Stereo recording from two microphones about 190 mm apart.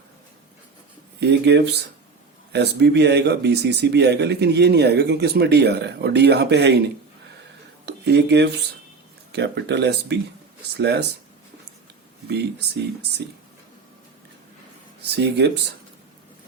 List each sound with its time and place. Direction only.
1.2 s speech: 60° right (ahead or behind)
7.9 s speech: 60° right (ahead or behind)
12.3 s speech: 60° right (ahead or behind)
15.1 s speech: 60° right (ahead or behind)